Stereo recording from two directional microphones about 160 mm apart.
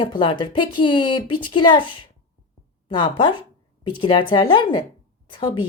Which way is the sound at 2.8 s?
30° left (ahead or behind).